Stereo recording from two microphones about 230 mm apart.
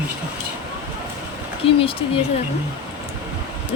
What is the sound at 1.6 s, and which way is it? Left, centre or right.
Speech, left.